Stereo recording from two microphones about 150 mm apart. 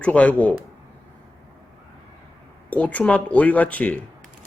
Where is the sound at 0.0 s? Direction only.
10° left (ahead or behind).